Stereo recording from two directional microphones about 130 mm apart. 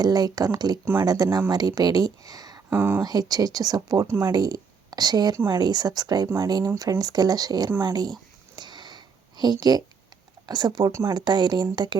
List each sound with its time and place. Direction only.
0.0 s speech: 30° right (ahead or behind)
2.6 s speech: 15° right (ahead or behind)
3.0 s a woman's voice: 30° right (ahead or behind)
7.9 s a sound: 30° right (ahead or behind)
9.4 s speech: 30° right (ahead or behind)